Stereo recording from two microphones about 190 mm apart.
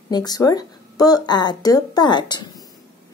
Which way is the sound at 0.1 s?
20° left (ahead or behind).